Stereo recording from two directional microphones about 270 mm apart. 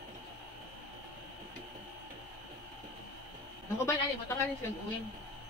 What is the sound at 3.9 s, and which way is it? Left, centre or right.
Speech, centre.